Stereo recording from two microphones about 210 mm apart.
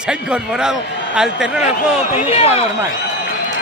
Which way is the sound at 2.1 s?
30° left (ahead or behind).